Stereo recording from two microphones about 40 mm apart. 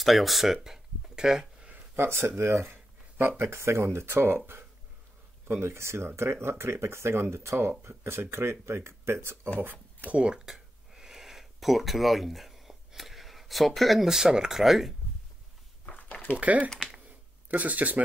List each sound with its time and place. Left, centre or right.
0.0 s speech: centre
2.0 s speech: right
5.6 s speech: right
9.6 s speech: right
10.1 s speech: right
10.4 s a sound: centre
14.0 s speech: centre
14.6 s speech: centre
15.8 s a sound: left
16.3 s speech: right